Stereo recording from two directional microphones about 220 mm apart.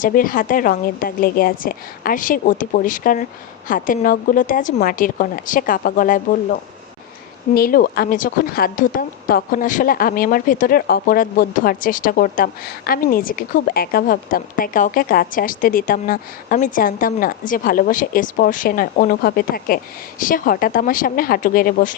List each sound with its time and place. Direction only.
0.0 s a woman's voice: 40° left (ahead or behind)